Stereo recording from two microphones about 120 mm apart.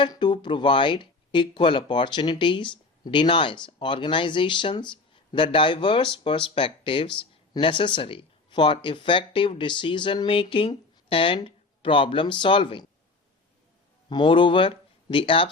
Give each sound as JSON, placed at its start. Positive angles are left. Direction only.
{"t": 0.0, "sound": "speech", "side_deg": 40}
{"t": 14.1, "sound": "speech", "side_deg": 40}